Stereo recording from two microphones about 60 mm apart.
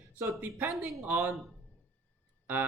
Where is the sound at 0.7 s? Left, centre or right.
Centre.